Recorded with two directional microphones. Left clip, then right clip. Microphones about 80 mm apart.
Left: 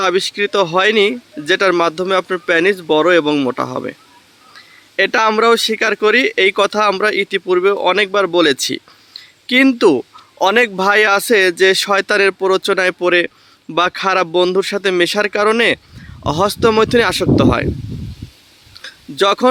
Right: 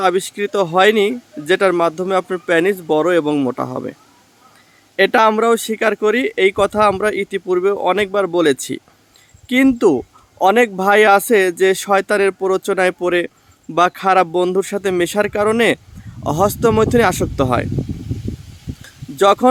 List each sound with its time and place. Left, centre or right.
0.0 s speech: right
3.5 s speech: centre
4.9 s speech: right
10.4 s speech: centre
18.8 s a sound: centre